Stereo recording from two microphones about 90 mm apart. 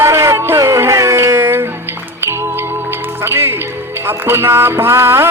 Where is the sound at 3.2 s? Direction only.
25° right (ahead or behind).